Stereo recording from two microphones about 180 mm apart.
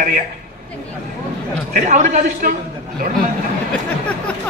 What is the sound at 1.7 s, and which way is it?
Speech, 45° right (ahead or behind).